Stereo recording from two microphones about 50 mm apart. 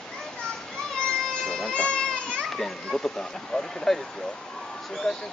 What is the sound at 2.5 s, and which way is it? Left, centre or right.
Speech, centre.